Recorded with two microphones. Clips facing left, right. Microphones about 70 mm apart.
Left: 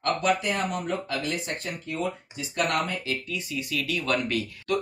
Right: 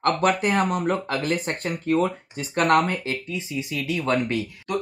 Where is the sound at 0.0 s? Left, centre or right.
Right.